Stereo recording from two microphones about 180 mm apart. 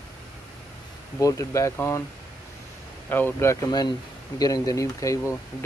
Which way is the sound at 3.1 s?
15° left (ahead or behind).